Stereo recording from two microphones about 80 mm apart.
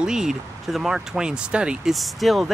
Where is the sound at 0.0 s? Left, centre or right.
Centre.